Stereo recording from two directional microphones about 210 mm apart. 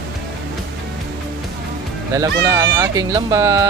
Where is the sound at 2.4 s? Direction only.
15° right (ahead or behind).